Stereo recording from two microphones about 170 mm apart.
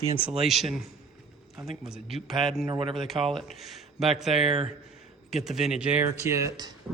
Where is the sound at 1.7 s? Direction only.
Centre (ahead or behind).